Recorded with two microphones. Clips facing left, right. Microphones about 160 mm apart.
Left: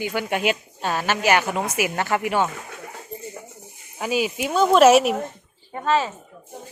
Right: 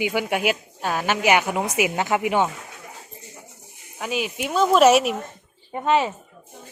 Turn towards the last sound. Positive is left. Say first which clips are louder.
# right 1 dB
turn(degrees=-25)  # may be behind; listen again after turning